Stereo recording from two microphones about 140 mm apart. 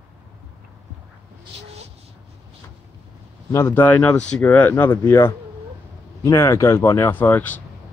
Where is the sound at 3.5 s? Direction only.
15° left (ahead or behind).